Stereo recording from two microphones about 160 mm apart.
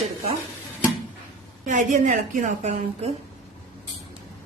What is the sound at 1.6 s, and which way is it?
A woman's voice, 50° right (ahead or behind).